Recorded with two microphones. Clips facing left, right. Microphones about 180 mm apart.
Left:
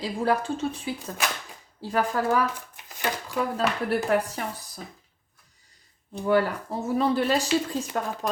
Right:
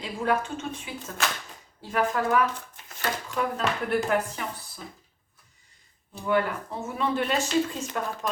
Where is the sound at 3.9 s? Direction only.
35° left (ahead or behind).